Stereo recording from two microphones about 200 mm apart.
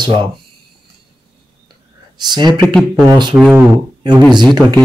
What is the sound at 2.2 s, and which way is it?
Speech, 20° right (ahead or behind).